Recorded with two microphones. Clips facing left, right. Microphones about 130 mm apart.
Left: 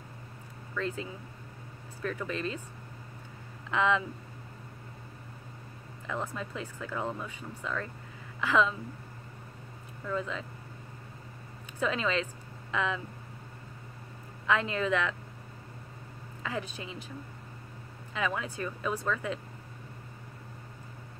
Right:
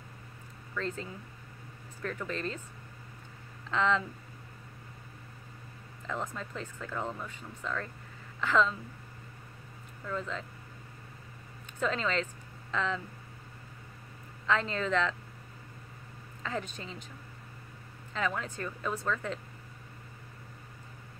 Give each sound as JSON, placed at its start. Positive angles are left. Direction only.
{"t": 0.7, "sound": "speech", "side_deg": 15}
{"t": 3.7, "sound": "speech", "side_deg": 15}
{"t": 6.2, "sound": "speech", "side_deg": 15}
{"t": 10.0, "sound": "speech", "side_deg": 15}
{"t": 11.8, "sound": "speech", "side_deg": 15}
{"t": 14.4, "sound": "speech", "side_deg": 15}
{"t": 16.4, "sound": "speech", "side_deg": 15}
{"t": 18.1, "sound": "speech", "side_deg": 15}